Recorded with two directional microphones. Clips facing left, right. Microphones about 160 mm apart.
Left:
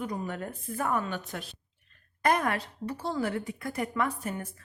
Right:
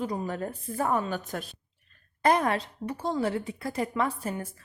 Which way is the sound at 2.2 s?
25° right (ahead or behind).